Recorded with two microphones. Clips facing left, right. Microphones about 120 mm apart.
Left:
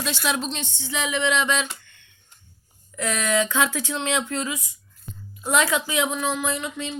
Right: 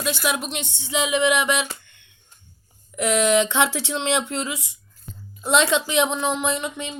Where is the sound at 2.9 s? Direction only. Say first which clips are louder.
Right 5 dB; 20° right (ahead or behind).